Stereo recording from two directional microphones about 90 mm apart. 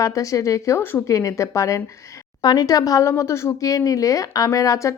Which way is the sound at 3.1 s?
30° left (ahead or behind).